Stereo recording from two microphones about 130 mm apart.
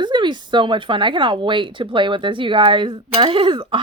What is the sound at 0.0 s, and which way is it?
Speech, 35° right (ahead or behind).